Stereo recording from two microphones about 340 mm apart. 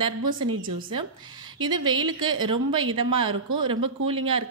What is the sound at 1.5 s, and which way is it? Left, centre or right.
A woman's voice, centre.